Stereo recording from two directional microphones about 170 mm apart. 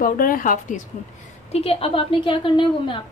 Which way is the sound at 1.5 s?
35° left (ahead or behind).